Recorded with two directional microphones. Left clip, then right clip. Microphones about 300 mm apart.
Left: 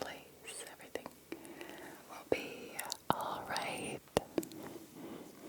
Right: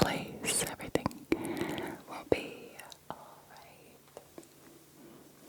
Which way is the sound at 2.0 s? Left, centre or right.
Right.